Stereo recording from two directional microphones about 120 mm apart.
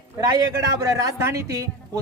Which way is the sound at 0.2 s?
35° right (ahead or behind).